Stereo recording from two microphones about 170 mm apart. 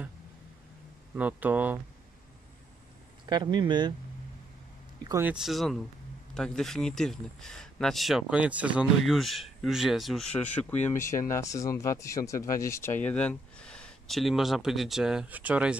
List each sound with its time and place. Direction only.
1.1 s speech: 10° right (ahead or behind)
3.3 s speech: 25° right (ahead or behind)
5.0 s speech: 15° right (ahead or behind)
5.3 s speech: centre (ahead or behind)